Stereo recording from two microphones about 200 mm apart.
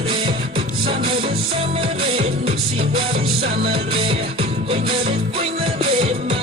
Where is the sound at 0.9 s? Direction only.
25° right (ahead or behind).